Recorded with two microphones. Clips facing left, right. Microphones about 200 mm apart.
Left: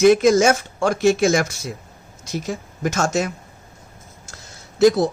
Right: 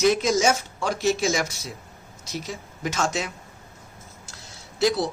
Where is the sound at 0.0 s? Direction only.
50° left (ahead or behind).